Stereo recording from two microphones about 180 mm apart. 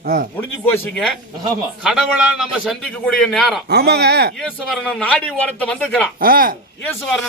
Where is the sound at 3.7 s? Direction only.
65° right (ahead or behind).